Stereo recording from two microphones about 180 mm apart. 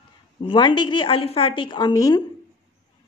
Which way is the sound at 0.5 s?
25° left (ahead or behind).